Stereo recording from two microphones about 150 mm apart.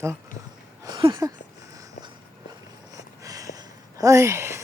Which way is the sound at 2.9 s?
25° right (ahead or behind).